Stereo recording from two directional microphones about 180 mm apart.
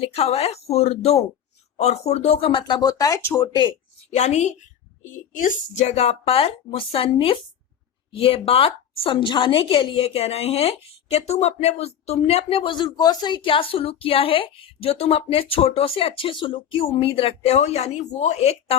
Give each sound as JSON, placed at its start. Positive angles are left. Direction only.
{"t": 0.0, "sound": "a man's voice", "side_deg": 35}
{"t": 4.1, "sound": "a man's voice", "side_deg": 35}